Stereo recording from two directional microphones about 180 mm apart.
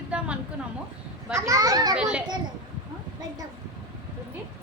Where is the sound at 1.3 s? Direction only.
15° right (ahead or behind).